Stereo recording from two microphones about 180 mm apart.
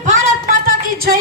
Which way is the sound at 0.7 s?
55° right (ahead or behind).